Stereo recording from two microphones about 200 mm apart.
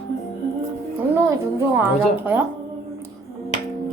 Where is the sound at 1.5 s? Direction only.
5° right (ahead or behind).